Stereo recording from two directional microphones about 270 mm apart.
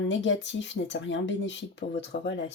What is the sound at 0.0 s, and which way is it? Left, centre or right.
Speech, left.